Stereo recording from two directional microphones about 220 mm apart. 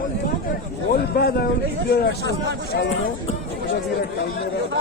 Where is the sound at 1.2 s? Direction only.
45° left (ahead or behind).